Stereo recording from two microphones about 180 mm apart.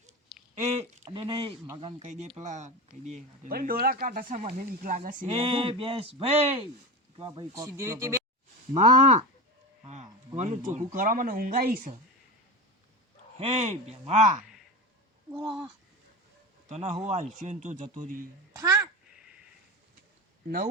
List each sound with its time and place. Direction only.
0.6 s speech: 40° right (ahead or behind)
2.0 s speech: 40° right (ahead or behind)
5.2 s speech: 30° right (ahead or behind); by 8.2 s 15° right (ahead or behind)
8.7 s speech: 40° right (ahead or behind)
13.4 s speech: 40° right (ahead or behind)
16.6 s speech: 40° right (ahead or behind)
18.5 s a child's voice: 15° right (ahead or behind)
19.1 s a sound: 5° right (ahead or behind)